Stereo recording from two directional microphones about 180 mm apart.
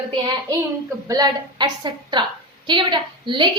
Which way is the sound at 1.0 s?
20° right (ahead or behind).